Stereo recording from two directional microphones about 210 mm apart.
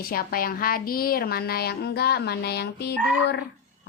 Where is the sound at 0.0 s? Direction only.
45° left (ahead or behind).